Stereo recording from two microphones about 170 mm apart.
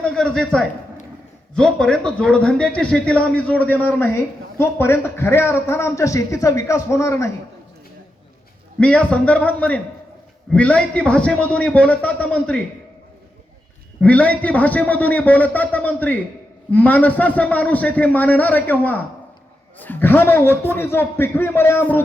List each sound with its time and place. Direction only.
0.0 s a man's voice: 5° left (ahead or behind)
8.8 s a man's voice: 5° left (ahead or behind)
14.0 s a man's voice: 10° left (ahead or behind)